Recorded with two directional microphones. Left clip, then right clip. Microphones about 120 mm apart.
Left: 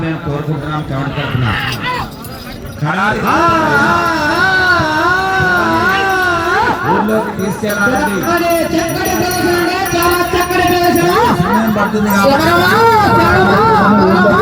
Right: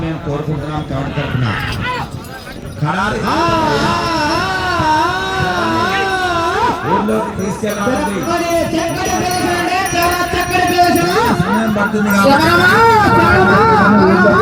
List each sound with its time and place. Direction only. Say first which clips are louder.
3.1 s speech: left 5 dB; 20° right (ahead or behind)
5.6 s cat: left 3 dB; 5° right (ahead or behind)
9.4 s music: left 3 dB; 65° right (ahead or behind)
12.0 s speech: right 1 dB; 55° right (ahead or behind); by 14.4 s 30° right (ahead or behind)